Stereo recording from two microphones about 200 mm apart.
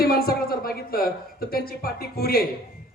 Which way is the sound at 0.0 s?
50° left (ahead or behind).